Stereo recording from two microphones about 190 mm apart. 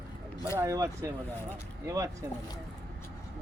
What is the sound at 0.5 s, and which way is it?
Speech, 15° right (ahead or behind).